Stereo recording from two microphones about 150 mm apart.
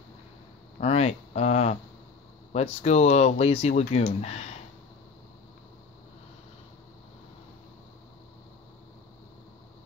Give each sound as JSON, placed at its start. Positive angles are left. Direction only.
{"t": 0.7, "sound": "speech", "side_deg": 45}